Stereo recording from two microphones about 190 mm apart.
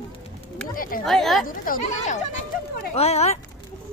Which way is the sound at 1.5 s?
45° left (ahead or behind).